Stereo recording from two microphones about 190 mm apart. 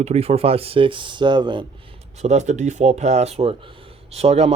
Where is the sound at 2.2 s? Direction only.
35° right (ahead or behind).